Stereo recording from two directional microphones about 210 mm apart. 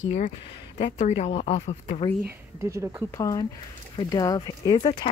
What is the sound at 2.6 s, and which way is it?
Speech, 15° right (ahead or behind).